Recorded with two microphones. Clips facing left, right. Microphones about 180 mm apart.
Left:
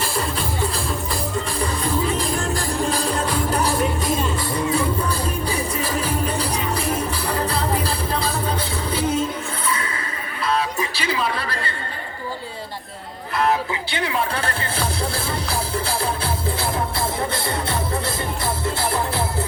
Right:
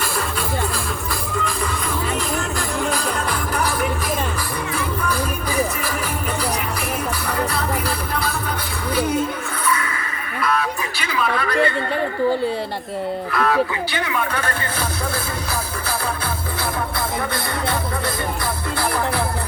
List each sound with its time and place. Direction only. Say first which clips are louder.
2.9 s music: left 1 dB; 30° left (ahead or behind)
7.3 s music: even; 25° left (ahead or behind)
10.4 s a sound: even; 30° left (ahead or behind)
13.3 s speech: even; 25° left (ahead or behind)